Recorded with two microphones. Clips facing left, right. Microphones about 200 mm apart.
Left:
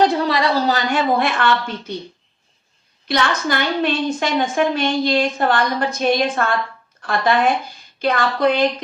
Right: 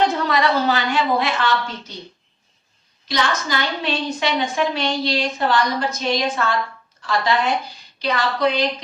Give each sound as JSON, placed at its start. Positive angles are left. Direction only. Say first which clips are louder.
{"t": 0.2, "sound": "a woman's voice", "louder": "left 1 dB", "side_deg": 35}
{"t": 3.1, "sound": "a woman's voice", "louder": "left 3 dB", "side_deg": 55}